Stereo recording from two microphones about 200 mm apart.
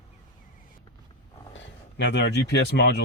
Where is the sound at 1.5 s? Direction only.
60° left (ahead or behind).